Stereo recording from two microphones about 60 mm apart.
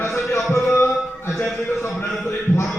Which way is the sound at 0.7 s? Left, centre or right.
Left.